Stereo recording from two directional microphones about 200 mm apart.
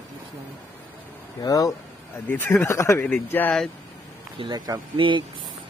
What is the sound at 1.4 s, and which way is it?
Speech, 15° left (ahead or behind).